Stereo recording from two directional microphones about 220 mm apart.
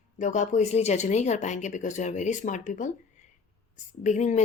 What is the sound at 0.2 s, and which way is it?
A woman's voice, 35° left (ahead or behind).